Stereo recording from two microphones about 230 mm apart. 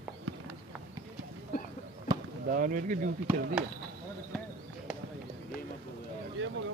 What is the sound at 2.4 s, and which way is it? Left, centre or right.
Speech, right.